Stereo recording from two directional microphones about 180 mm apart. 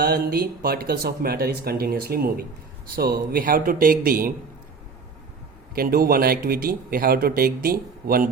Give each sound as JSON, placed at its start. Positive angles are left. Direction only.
{"t": 0.0, "sound": "speech", "side_deg": -55}
{"t": 5.7, "sound": "speech", "side_deg": -55}